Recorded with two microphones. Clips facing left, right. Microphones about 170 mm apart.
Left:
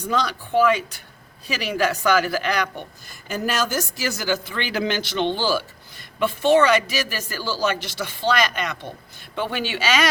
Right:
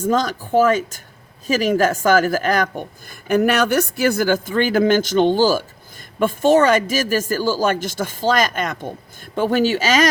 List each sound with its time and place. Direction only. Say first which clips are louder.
0.0 s a woman's voice: right 5 dB; 45° right (ahead or behind)